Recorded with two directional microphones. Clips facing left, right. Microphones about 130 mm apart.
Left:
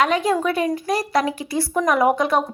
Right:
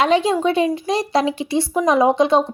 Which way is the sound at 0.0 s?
25° right (ahead or behind).